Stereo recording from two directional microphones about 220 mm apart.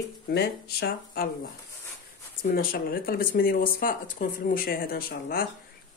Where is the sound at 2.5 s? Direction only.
40° left (ahead or behind).